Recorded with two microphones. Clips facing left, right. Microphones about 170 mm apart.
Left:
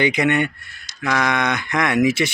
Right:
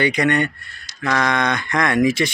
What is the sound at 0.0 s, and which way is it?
A man's voice, 10° left (ahead or behind).